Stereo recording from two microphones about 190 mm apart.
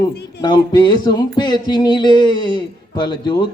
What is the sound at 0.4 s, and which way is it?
Music, 25° left (ahead or behind).